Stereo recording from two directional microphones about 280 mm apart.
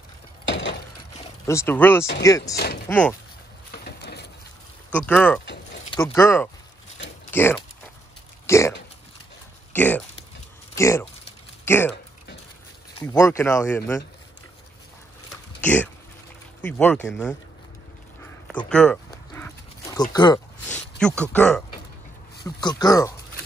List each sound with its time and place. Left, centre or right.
0.5 s a sound: left
1.4 s speech: centre
2.5 s speech: left
2.9 s speech: centre
3.7 s a sound: left
5.0 s speech: centre
8.5 s hiccup: centre
9.8 s speech: centre
13.0 s speech: centre
15.6 s speech: centre
18.2 s a sound: centre
19.0 s dog: centre
22.4 s speech: centre